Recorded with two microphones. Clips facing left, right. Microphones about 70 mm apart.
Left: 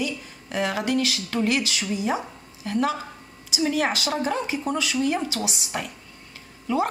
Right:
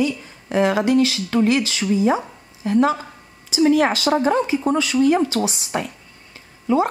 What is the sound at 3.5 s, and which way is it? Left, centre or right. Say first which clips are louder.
A woman's voice: right 8 dB; right.